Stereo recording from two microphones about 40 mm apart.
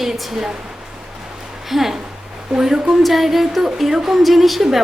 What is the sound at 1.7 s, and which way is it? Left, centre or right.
A woman's voice, centre.